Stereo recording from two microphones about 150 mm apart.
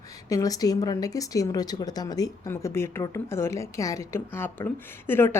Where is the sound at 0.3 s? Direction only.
25° left (ahead or behind).